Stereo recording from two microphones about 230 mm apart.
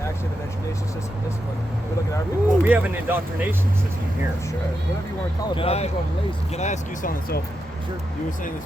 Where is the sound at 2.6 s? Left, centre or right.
Centre.